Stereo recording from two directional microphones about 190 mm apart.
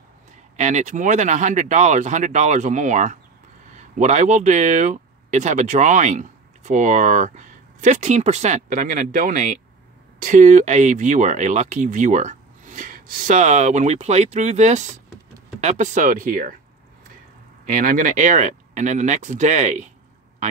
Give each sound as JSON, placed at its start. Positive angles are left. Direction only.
{"t": 0.6, "sound": "speech", "side_deg": -40}
{"t": 17.6, "sound": "speech", "side_deg": -45}